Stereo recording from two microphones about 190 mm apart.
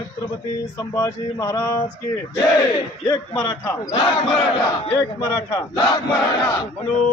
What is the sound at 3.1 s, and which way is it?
Speech, 15° left (ahead or behind).